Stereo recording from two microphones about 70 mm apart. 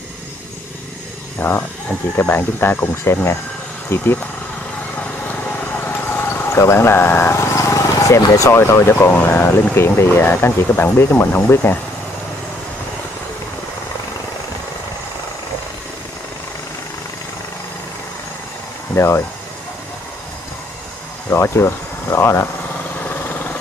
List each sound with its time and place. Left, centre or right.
1.4 s speech: left
4.9 s vehicle: left
8.3 s speech: left
18.9 s speech: left
21.3 s speech: left
22.9 s lawn mower: left